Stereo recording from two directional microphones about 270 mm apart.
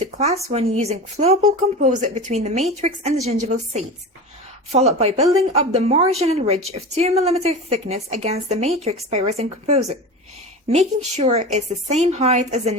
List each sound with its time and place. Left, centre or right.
0.0 s a woman's voice: right